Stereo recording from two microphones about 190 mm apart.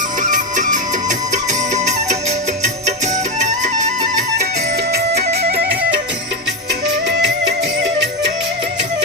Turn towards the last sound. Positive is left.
turn(degrees=-60)  # may be behind; listen again after turning